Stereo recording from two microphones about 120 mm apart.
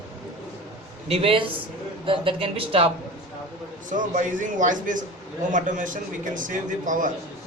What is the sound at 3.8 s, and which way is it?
A man's voice, 90° right.